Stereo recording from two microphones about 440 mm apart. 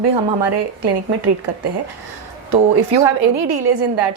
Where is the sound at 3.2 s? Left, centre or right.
Right.